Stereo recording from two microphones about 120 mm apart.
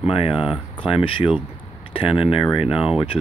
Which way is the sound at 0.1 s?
50° left (ahead or behind).